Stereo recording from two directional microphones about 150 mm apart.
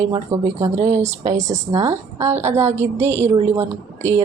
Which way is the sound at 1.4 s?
50° right (ahead or behind).